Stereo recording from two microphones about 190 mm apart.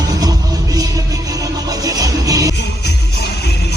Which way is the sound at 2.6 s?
60° left (ahead or behind).